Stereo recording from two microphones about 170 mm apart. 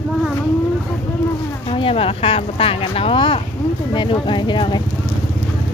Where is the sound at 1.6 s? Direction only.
30° left (ahead or behind).